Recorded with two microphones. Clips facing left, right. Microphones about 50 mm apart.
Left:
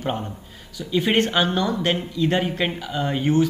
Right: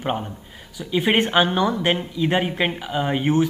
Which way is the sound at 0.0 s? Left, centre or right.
Centre.